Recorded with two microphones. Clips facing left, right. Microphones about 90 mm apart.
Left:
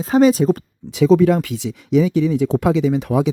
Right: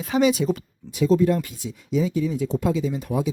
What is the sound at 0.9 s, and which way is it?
Speech, 90° left.